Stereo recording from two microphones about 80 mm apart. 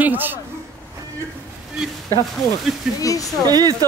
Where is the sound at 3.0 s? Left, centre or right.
Left.